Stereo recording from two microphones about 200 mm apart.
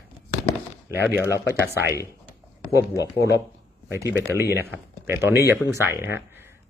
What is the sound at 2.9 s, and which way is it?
Speech, 15° left (ahead or behind).